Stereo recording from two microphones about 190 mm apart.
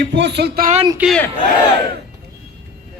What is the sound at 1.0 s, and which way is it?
Speech, centre (ahead or behind).